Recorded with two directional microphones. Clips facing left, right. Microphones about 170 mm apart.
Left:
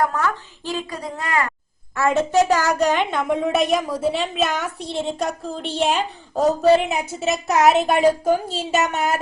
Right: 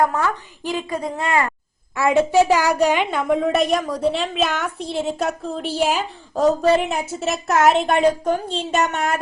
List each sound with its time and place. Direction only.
0.0 s a woman's voice: 20° right (ahead or behind)
2.0 s a woman's voice: 10° right (ahead or behind)